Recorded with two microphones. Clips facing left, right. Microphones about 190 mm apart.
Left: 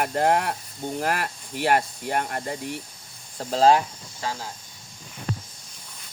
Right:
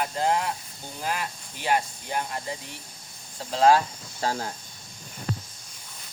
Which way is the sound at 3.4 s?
40° left (ahead or behind).